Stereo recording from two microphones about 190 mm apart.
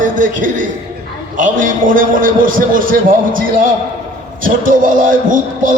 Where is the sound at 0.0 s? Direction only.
45° right (ahead or behind).